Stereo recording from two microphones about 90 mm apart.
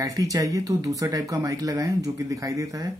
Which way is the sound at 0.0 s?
40° right (ahead or behind).